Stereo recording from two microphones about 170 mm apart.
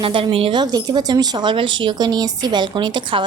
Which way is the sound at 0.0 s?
30° right (ahead or behind).